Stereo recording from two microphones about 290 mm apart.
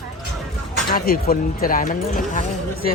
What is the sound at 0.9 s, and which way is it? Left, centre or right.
Speech, left.